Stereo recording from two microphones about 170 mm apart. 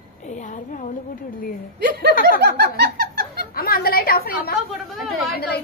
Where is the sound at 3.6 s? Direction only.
65° left (ahead or behind).